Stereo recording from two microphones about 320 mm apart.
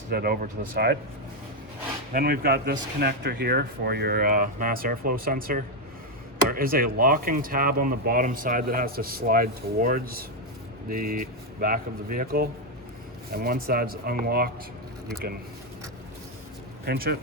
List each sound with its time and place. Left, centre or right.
0.1 s speech: right
2.1 s speech: right
16.8 s speech: right